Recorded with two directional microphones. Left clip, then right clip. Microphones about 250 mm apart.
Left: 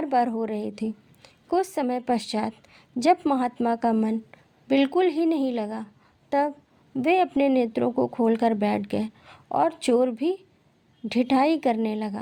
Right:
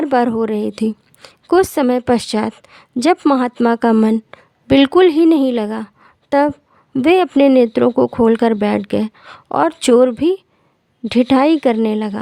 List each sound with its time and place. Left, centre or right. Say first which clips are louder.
0.0 s a woman's voice: right 8 dB; right